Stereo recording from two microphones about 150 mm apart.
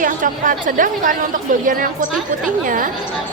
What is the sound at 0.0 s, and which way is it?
A woman's voice, 60° right (ahead or behind).